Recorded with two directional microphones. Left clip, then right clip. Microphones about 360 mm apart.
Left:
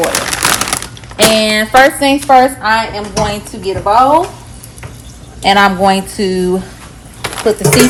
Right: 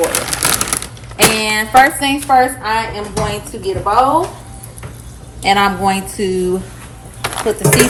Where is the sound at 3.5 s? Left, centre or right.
Left.